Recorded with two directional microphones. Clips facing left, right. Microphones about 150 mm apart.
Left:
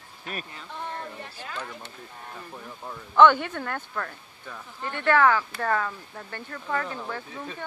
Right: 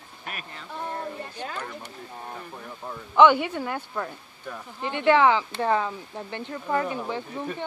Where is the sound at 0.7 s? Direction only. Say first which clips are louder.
Right 3 dB; 15° right (ahead or behind).